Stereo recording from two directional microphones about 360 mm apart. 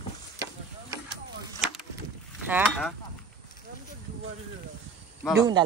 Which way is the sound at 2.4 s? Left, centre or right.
Centre.